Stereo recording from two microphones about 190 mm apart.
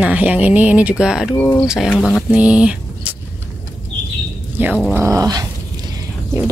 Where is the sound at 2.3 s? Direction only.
5° right (ahead or behind).